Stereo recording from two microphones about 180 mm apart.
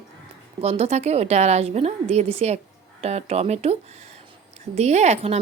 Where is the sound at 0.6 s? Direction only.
35° right (ahead or behind).